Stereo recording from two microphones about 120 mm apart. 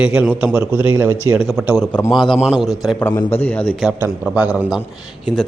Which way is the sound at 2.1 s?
40° left (ahead or behind).